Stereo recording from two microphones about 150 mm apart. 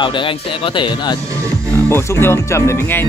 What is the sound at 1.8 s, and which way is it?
Speech, 15° left (ahead or behind).